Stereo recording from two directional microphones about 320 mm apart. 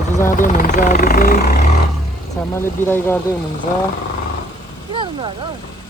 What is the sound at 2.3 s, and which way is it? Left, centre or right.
Speech, centre.